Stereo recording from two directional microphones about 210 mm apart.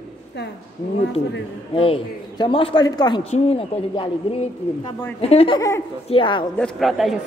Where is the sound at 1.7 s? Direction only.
25° left (ahead or behind).